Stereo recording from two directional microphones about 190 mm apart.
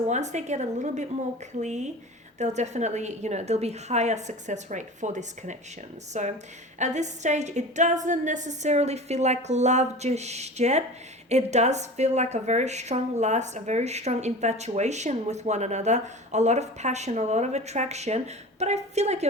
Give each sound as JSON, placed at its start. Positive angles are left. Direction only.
{"t": 0.1, "sound": "a woman's voice", "side_deg": -40}